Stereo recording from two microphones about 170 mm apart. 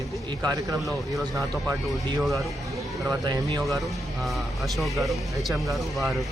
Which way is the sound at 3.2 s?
25° right (ahead or behind).